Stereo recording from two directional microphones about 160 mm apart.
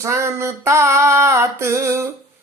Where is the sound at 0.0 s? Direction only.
15° right (ahead or behind).